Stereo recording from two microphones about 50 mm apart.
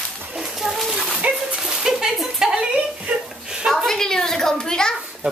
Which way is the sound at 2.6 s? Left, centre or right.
Right.